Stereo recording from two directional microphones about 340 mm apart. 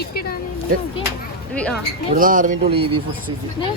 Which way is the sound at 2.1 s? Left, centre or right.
Right.